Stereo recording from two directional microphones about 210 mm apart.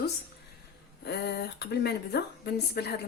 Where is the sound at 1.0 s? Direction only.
50° left (ahead or behind).